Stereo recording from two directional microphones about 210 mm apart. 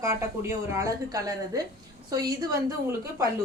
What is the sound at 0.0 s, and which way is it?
A woman's voice, 15° right (ahead or behind).